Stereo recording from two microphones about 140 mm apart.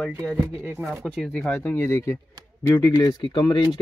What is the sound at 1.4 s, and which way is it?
A man's voice, 15° left (ahead or behind).